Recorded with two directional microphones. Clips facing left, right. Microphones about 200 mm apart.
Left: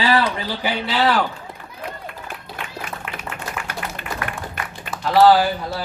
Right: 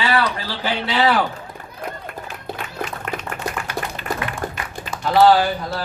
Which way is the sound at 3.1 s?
45° right (ahead or behind).